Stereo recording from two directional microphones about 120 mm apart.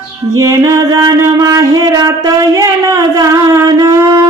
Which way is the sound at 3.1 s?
25° right (ahead or behind).